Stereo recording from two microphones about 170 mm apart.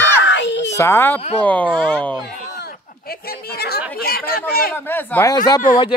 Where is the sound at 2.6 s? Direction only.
65° left (ahead or behind).